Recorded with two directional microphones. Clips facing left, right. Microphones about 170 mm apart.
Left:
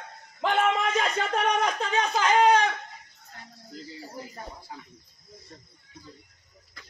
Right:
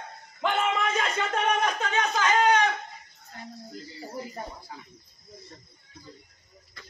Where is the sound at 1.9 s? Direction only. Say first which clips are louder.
Left 2 dB; 35° left (ahead or behind).